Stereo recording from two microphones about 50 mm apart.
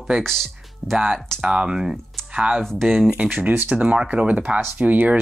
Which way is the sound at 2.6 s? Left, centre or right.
Centre.